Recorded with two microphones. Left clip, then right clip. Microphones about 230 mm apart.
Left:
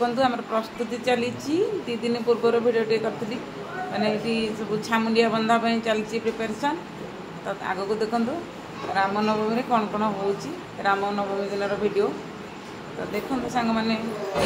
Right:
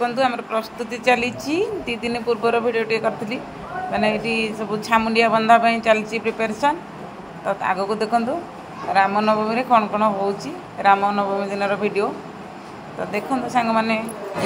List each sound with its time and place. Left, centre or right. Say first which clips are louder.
0.0 s a woman's voice: right 3 dB; centre
13.1 s a woman's voice: right 6 dB; centre